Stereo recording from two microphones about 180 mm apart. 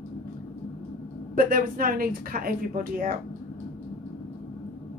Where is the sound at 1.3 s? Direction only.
50° right (ahead or behind).